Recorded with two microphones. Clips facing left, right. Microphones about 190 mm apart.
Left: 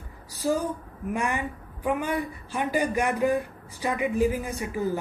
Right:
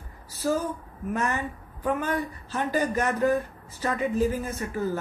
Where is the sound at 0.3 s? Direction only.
15° left (ahead or behind).